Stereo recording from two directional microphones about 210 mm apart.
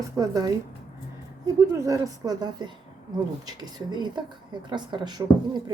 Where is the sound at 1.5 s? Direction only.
15° right (ahead or behind).